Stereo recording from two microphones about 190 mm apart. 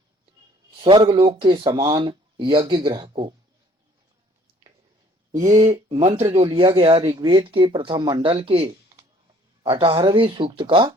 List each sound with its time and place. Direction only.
0.9 s speech: 25° right (ahead or behind)
5.3 s speech: 15° right (ahead or behind)
5.9 s speech: 35° right (ahead or behind)